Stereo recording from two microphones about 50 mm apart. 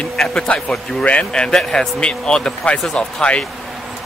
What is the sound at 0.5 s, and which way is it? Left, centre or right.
A man's voice, left.